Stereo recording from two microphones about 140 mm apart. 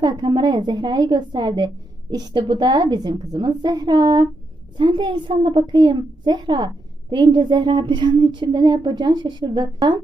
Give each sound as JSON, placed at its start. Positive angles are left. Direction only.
{"t": 0.0, "sound": "a woman's voice", "side_deg": -30}